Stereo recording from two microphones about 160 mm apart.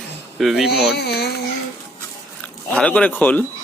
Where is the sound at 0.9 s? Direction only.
90° left.